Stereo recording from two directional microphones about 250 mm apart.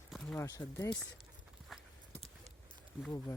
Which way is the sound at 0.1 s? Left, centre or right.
Centre.